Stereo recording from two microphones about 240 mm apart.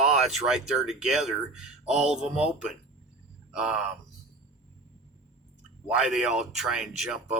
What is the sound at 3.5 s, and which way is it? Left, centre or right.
Speech, centre.